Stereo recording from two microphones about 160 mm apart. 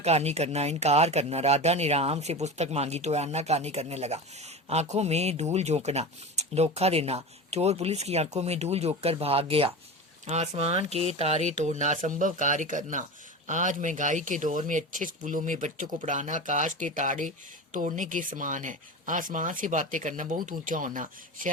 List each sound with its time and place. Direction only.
0.0 s speech: 40° right (ahead or behind)